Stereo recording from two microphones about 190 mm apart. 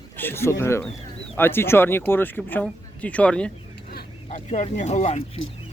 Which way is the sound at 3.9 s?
55° left (ahead or behind).